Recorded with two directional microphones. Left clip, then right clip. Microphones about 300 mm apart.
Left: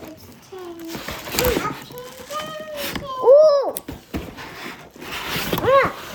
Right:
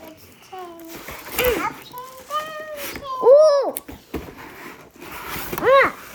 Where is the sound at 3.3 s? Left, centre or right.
Right.